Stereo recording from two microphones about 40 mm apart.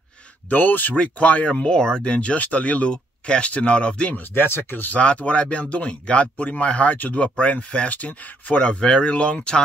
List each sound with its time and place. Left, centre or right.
0.5 s speech: left
0.9 s speech: left
2.0 s speech: left
2.3 s speech: left
4.3 s speech: left
4.9 s speech: left